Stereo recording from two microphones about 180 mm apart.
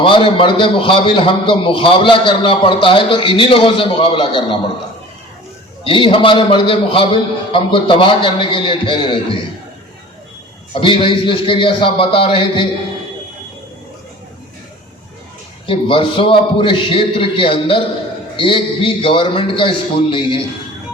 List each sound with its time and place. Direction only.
0.0 s a man's voice: 30° left (ahead or behind)
5.8 s a man's voice: 30° left (ahead or behind)
10.8 s a man's voice: 30° left (ahead or behind)
15.6 s a man's voice: 30° left (ahead or behind)